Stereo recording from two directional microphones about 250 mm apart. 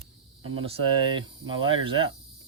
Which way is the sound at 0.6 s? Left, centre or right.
Right.